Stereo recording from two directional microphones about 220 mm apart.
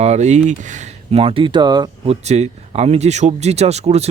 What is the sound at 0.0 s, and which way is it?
Speech, 30° right (ahead or behind).